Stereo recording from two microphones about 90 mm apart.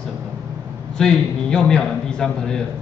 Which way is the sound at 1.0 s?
5° left (ahead or behind).